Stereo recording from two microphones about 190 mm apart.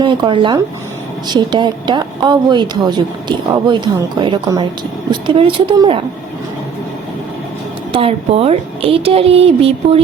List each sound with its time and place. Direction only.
0.0 s a woman's voice: 25° right (ahead or behind)
7.9 s speech: 30° right (ahead or behind)